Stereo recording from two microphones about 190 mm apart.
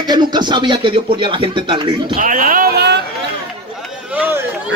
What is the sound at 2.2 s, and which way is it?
Speech, 45° right (ahead or behind).